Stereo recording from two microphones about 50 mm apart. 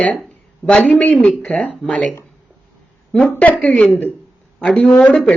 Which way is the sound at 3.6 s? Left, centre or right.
Left.